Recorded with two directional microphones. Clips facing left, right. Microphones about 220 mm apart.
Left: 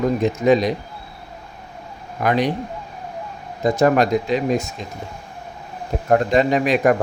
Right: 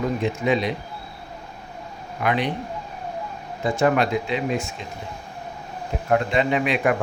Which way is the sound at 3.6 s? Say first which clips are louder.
Left 4 dB; 40° left (ahead or behind).